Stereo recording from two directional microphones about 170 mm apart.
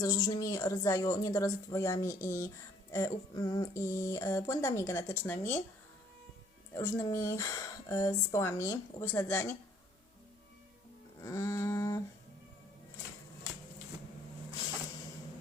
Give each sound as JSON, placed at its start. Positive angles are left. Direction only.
{"t": 0.0, "sound": "speech", "side_deg": 20}
{"t": 6.7, "sound": "speech", "side_deg": 15}
{"t": 11.2, "sound": "a sound", "side_deg": 20}